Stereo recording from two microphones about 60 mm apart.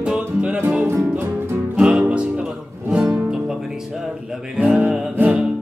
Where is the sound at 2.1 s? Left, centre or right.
Centre.